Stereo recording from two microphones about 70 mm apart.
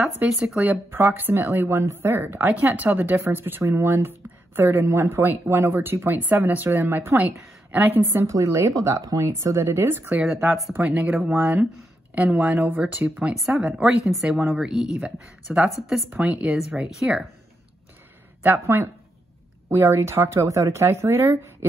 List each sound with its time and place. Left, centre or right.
0.3 s speech: centre
0.8 s speech: right
8.3 s speech: right
10.2 s speech: centre
10.7 s speech: centre
12.2 s speech: right
13.3 s speech: centre
16.1 s speech: centre
16.4 s speech: centre
18.4 s speech: right